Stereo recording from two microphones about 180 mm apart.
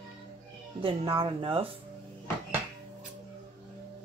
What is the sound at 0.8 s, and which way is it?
Speech, 30° right (ahead or behind).